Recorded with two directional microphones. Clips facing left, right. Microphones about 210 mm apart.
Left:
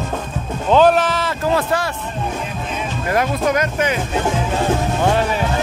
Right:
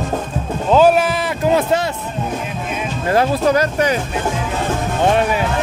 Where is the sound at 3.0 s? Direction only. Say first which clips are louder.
Right 3 dB; 30° right (ahead or behind).